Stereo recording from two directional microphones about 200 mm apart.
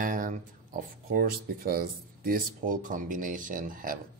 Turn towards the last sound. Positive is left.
turn(degrees=-45)  # may be behind; listen again after turning